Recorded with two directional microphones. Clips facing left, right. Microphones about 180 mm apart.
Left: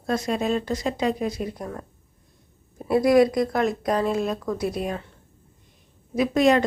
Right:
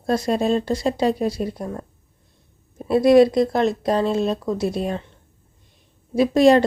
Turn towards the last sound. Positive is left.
turn(degrees=-30)  # may be behind; listen again after turning